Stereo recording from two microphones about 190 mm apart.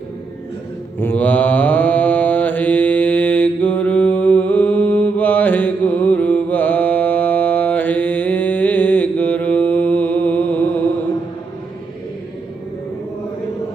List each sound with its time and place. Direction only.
0.9 s mantra: 10° left (ahead or behind)